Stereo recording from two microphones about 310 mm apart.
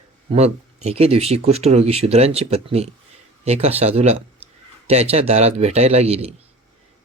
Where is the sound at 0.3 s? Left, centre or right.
Right.